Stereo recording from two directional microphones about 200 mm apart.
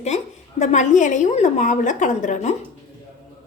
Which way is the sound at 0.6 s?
35° left (ahead or behind).